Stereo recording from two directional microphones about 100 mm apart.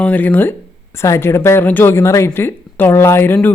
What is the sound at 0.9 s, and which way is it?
Speech, 25° left (ahead or behind).